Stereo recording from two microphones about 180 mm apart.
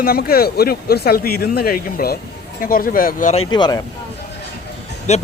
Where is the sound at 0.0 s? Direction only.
55° left (ahead or behind).